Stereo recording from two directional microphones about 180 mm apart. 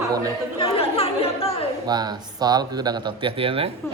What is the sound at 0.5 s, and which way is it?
Chatter, 30° left (ahead or behind).